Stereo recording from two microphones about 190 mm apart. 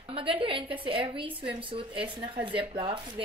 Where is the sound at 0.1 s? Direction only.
30° right (ahead or behind).